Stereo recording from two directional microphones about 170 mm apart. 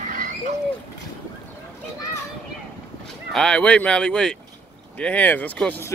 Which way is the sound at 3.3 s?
5° left (ahead or behind).